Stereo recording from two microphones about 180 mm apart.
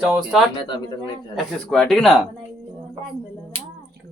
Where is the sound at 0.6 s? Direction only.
25° left (ahead or behind).